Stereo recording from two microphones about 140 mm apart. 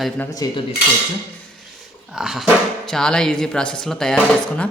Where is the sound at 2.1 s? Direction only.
Centre (ahead or behind).